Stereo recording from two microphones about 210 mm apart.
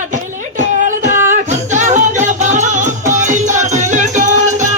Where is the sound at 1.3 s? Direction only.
35° right (ahead or behind).